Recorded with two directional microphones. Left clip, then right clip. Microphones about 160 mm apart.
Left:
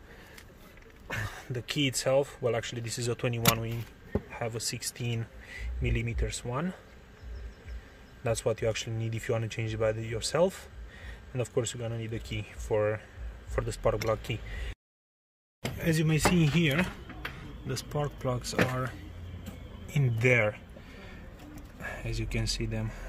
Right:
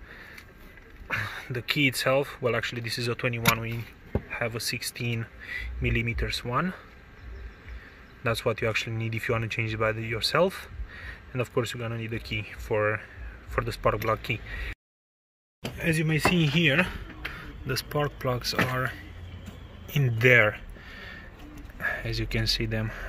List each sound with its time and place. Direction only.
1.0 s a sound: 20° left (ahead or behind)
1.5 s speech: centre (ahead or behind); by 3.7 s 20° left (ahead or behind)
4.3 s speech: centre (ahead or behind)
8.5 s speech: 5° right (ahead or behind)
15.8 s speech: 10° left (ahead or behind)
17.6 s speech: 10° right (ahead or behind)
19.9 s a sound: 5° right (ahead or behind)
21.8 s speech: 15° right (ahead or behind)